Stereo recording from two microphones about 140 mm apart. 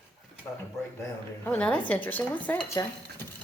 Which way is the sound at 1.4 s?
10° left (ahead or behind).